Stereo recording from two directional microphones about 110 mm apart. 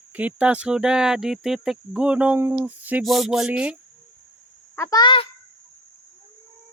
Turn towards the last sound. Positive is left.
turn(degrees=50)  # may be behind; listen again after turning